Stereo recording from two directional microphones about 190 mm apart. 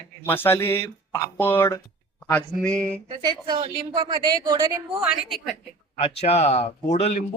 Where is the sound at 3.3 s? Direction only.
25° right (ahead or behind).